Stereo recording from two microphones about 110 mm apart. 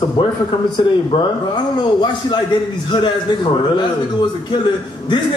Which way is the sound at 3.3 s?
45° left (ahead or behind).